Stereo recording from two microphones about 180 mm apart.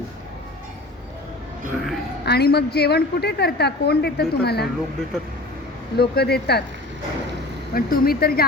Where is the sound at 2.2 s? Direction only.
65° left (ahead or behind).